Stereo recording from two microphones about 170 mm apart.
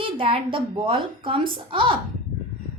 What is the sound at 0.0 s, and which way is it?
Speech, 30° right (ahead or behind).